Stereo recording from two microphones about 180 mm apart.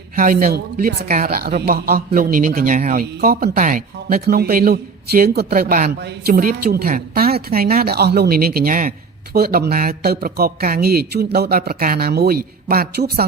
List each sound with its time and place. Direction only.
0.2 s speech: 50° right (ahead or behind)